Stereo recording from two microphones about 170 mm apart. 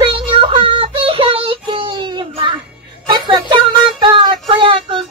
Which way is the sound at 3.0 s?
30° right (ahead or behind).